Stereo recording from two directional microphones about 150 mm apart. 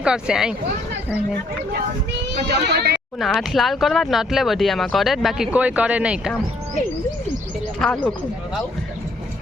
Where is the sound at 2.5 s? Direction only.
90° right.